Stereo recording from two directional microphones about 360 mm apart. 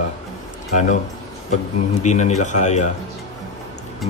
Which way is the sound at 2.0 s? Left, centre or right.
Centre.